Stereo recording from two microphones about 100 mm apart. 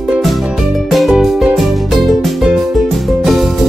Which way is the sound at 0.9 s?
Centre (ahead or behind).